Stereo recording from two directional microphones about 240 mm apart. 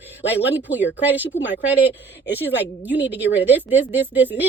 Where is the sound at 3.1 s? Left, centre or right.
Left.